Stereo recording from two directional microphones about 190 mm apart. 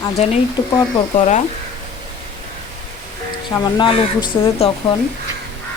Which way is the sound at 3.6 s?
25° left (ahead or behind).